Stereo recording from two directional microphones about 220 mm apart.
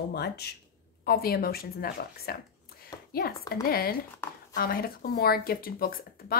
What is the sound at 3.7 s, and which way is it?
A woman's voice, 45° left (ahead or behind).